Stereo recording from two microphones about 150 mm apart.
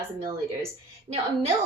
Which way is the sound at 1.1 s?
45° right (ahead or behind).